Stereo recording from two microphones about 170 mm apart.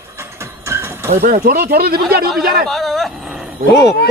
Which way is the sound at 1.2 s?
55° right (ahead or behind).